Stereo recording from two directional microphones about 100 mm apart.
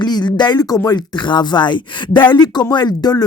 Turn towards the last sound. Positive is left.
turn(degrees=45)  # may be behind; listen again after turning